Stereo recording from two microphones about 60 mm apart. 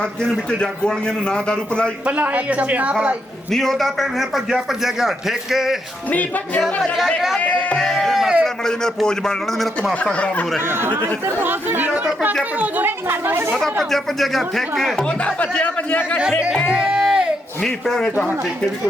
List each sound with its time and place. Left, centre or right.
0.6 s a man's voice: centre
2.0 s speech: right
3.5 s a man's voice: centre
6.1 s speech: left
7.8 s music: centre
8.6 s a man's voice: centre
9.9 s speech: left
10.7 s speech: right
13.5 s a man's voice: centre
14.9 s speech: centre
16.6 s music: centre
17.6 s a man's voice: centre